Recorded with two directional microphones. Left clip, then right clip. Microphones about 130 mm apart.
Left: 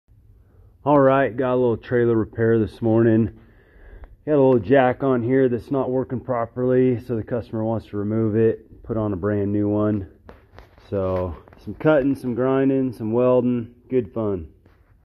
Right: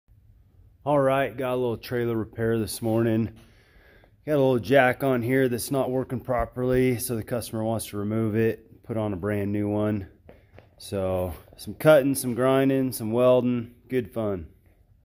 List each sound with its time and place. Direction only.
0.8 s speech: 25° left (ahead or behind); by 3.3 s 10° left (ahead or behind)
4.2 s speech: centre (ahead or behind)
4.9 s speech: 20° right (ahead or behind)